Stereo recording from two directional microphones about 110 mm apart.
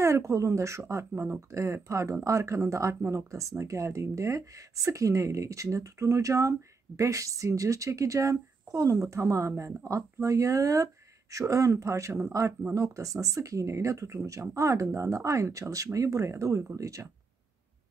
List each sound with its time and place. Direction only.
0.0 s speech: 25° right (ahead or behind)
9.6 s speech: 15° right (ahead or behind)
10.2 s speech: 30° right (ahead or behind)